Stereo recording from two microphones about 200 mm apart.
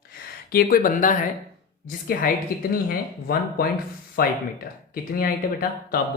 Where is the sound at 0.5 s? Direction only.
45° left (ahead or behind).